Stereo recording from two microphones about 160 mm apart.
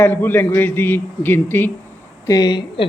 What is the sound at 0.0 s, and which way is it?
A man's voice, 10° left (ahead or behind).